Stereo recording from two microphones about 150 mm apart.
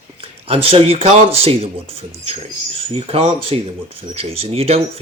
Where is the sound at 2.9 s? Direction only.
40° right (ahead or behind).